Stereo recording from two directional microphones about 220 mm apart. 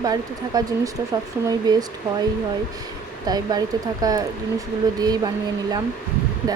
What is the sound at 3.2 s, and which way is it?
Speech, 15° right (ahead or behind).